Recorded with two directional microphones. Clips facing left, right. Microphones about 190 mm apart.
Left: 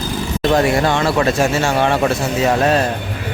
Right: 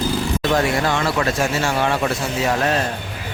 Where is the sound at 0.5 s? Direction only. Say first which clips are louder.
Left 5 dB; 25° left (ahead or behind).